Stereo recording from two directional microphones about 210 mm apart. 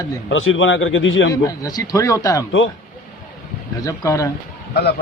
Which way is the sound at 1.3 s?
15° left (ahead or behind).